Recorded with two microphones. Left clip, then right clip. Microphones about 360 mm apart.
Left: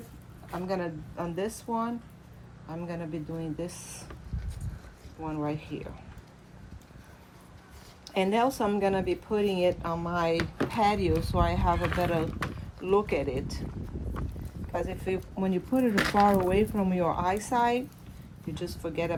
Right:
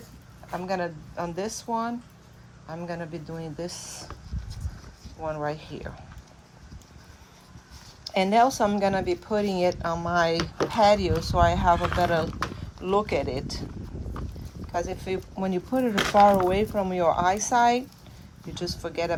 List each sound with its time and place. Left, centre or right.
0.6 s speech: right
5.2 s speech: right
8.1 s speech: right
14.7 s speech: right